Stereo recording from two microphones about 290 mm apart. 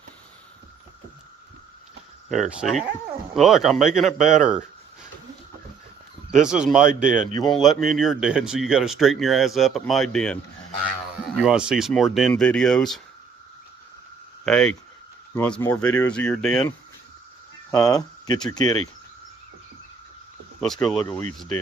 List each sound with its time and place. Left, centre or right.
2.3 s speech: centre
6.3 s speech: centre
7.1 s speech: right
7.5 s speech: centre
11.4 s speech: centre
14.4 s speech: centre
17.7 s speech: centre
20.6 s speech: centre